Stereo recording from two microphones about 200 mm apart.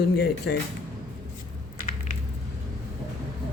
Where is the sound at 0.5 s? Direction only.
55° left (ahead or behind).